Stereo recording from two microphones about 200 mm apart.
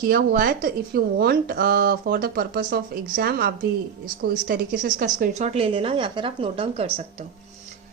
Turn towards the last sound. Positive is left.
turn(degrees=-30)  # may be behind; listen again after turning